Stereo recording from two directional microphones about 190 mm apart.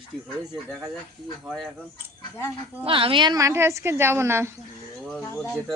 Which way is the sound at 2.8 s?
30° right (ahead or behind).